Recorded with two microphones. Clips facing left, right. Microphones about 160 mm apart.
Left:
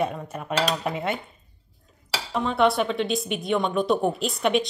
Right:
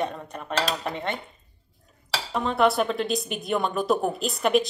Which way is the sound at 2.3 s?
Centre (ahead or behind).